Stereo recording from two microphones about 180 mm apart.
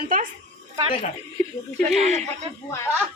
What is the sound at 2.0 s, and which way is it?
Speech, 40° right (ahead or behind).